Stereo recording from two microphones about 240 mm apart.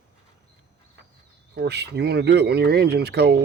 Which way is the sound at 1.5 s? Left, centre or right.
Right.